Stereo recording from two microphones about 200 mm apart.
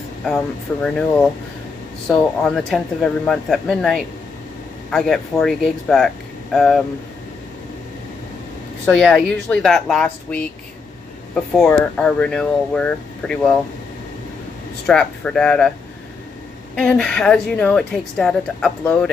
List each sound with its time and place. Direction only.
0.8 s a woman's voice: 5° left (ahead or behind)
8.8 s a woman's voice: 5° left (ahead or behind)
11.5 s a woman's voice: 5° left (ahead or behind)
14.9 s a woman's voice: 5° left (ahead or behind)
16.7 s a woman's voice: 5° left (ahead or behind)